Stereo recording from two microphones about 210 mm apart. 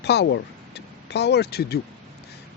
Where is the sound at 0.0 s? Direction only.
55° left (ahead or behind).